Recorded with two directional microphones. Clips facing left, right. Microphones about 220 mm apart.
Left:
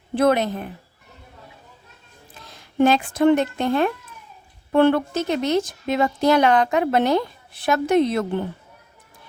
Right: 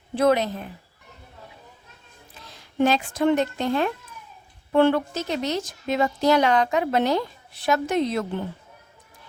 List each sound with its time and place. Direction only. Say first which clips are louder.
0.2 s speech: left 2 dB; 55° left (ahead or behind)
2.8 s speech: left 4 dB; 55° left (ahead or behind)